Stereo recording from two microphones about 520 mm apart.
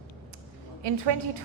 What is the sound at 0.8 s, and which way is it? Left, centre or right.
Speech, right.